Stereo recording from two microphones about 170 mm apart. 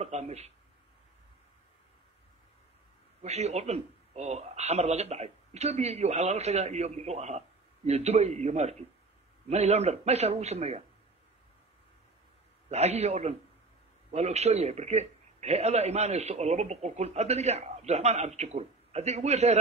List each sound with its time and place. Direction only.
0.0 s speech: 40° right (ahead or behind)
3.2 s speech: 40° right (ahead or behind)
12.6 s speech: 40° right (ahead or behind)